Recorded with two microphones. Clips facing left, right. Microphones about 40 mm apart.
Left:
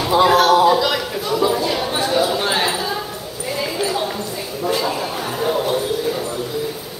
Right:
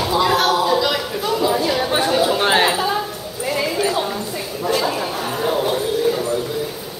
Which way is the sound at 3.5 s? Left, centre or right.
Centre.